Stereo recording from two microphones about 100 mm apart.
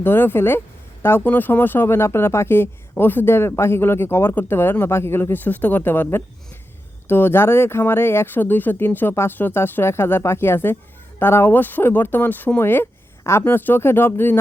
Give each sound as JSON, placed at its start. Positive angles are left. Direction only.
{"t": 0.0, "sound": "speech", "side_deg": 20}